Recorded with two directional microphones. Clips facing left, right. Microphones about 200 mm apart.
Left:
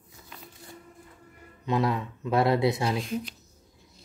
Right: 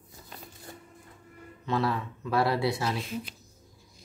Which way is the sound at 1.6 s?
15° left (ahead or behind).